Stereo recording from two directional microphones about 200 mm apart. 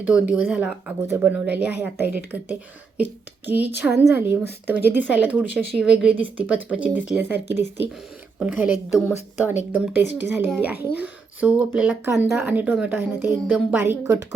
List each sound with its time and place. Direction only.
0.1 s a woman's voice: 5° right (ahead or behind)